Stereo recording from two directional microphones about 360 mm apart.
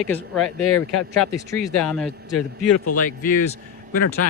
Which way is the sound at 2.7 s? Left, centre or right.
Left.